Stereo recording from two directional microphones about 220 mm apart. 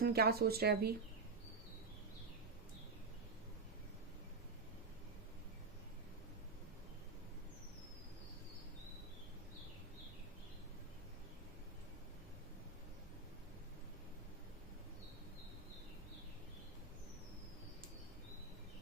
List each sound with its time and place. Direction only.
0.0 s speech: 45° right (ahead or behind)